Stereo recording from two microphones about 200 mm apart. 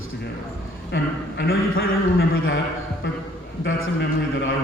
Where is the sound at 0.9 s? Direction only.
55° left (ahead or behind).